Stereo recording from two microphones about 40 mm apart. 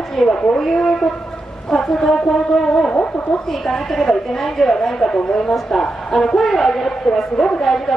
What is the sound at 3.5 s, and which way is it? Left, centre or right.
A woman's voice, centre.